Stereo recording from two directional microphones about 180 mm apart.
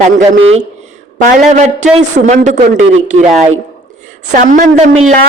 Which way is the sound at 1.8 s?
40° right (ahead or behind).